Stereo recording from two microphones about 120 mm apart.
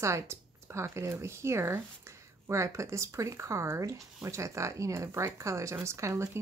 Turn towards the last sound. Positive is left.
turn(degrees=-25)  # may be behind; listen again after turning